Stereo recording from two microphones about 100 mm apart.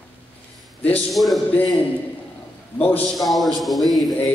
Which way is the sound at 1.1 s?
Centre (ahead or behind).